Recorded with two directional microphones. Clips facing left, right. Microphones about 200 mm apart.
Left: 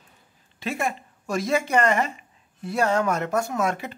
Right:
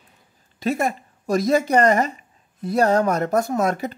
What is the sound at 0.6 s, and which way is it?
Speech, 40° right (ahead or behind).